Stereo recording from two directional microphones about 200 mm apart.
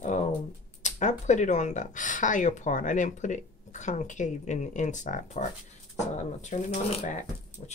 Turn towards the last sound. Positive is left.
turn(degrees=35)  # may be behind; listen again after turning